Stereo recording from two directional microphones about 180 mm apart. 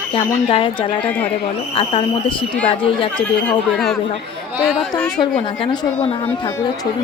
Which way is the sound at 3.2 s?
5° left (ahead or behind).